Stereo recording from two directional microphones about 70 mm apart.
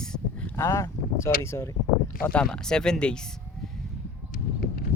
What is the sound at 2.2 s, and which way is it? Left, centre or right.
Speech, centre.